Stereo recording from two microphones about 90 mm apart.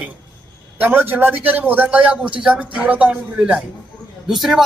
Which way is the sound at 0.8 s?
20° right (ahead or behind).